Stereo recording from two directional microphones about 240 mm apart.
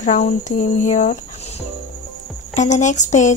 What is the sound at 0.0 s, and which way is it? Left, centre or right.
Speech, left.